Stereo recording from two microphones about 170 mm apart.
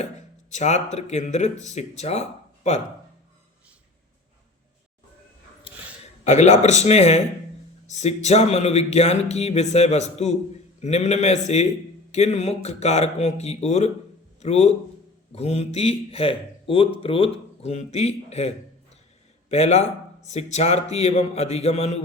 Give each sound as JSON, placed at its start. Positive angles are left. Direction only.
{"t": 0.5, "sound": "speech", "side_deg": 45}
{"t": 6.2, "sound": "a man's voice", "side_deg": 40}